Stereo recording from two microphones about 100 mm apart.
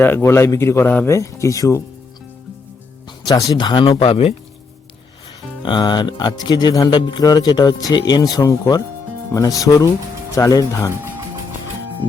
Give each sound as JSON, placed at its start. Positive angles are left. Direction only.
{"t": 0.0, "sound": "a man's voice", "side_deg": 25}
{"t": 3.5, "sound": "speech", "side_deg": 45}
{"t": 4.0, "sound": "speech", "side_deg": 80}
{"t": 5.6, "sound": "speech", "side_deg": 50}